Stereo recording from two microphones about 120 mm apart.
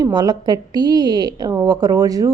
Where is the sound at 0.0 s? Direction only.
35° right (ahead or behind).